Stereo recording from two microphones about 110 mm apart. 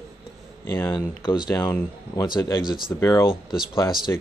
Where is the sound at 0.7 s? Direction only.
25° left (ahead or behind).